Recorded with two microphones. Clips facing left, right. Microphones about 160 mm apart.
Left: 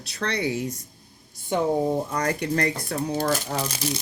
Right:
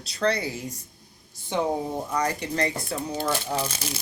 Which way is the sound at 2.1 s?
55° left (ahead or behind).